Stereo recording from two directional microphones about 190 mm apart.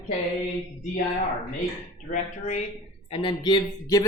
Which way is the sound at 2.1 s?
40° left (ahead or behind).